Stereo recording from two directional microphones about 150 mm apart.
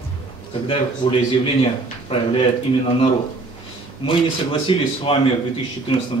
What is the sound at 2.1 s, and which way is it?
Speech, 40° left (ahead or behind).